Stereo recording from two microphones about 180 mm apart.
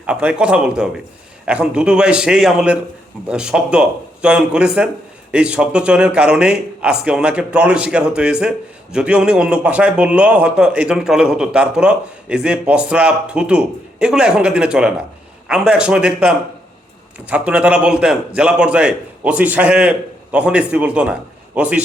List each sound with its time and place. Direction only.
0.0 s a man's voice: 5° right (ahead or behind)